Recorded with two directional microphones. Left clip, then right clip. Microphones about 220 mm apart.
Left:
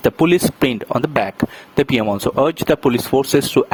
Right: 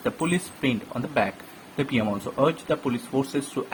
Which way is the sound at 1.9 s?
45° left (ahead or behind).